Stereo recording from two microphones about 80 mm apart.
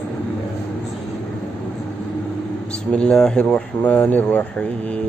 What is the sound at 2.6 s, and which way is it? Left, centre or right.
Speech, centre.